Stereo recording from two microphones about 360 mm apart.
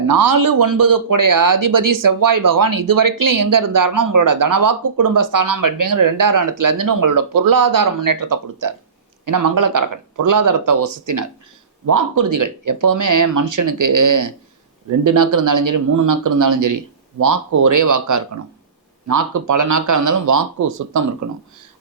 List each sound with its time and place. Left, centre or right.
0.1 s a man's voice: right